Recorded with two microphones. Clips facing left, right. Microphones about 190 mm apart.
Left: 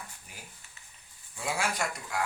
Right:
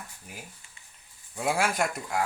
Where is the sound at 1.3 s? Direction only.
55° right (ahead or behind).